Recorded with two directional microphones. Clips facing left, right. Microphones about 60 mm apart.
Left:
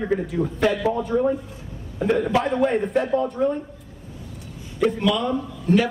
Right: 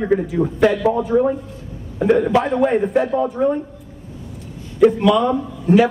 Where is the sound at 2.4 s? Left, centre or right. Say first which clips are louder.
Right 4 dB; centre.